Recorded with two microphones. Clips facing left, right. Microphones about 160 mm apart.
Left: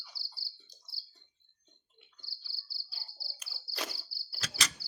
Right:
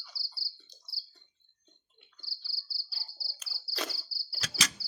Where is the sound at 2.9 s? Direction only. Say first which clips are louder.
Left 1 dB; 20° left (ahead or behind).